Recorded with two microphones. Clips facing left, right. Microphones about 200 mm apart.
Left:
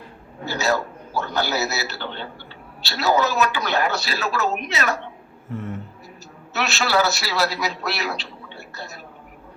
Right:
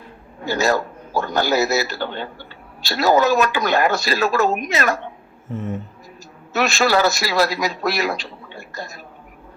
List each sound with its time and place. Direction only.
0.5 s a man's voice: 50° right (ahead or behind)
5.5 s speech: 20° right (ahead or behind)
6.6 s a man's voice: 50° right (ahead or behind)